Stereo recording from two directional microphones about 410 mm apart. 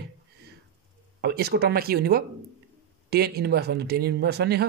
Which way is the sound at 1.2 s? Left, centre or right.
Right.